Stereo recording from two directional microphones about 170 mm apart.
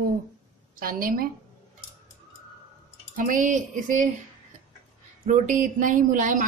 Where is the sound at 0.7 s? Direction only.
55° right (ahead or behind).